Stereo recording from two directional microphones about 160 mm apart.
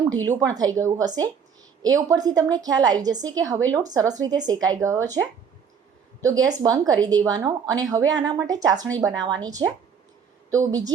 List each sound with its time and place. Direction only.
0.3 s a woman's voice: 25° right (ahead or behind)
6.2 s a woman's voice: 20° right (ahead or behind)